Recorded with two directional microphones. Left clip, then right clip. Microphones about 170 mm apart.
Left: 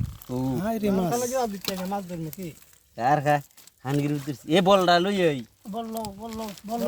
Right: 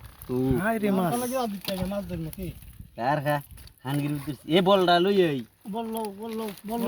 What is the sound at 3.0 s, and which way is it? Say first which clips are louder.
Speech: left 4 dB; 50° left (ahead or behind).